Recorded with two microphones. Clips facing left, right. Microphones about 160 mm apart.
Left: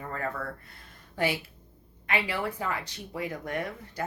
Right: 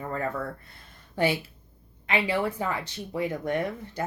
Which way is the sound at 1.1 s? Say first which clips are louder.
Right 4 dB; 25° right (ahead or behind).